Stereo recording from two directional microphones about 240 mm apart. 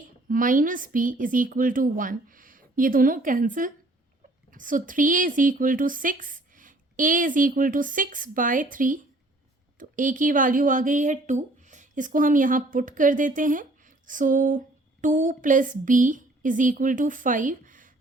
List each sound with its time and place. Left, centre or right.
0.3 s speech: right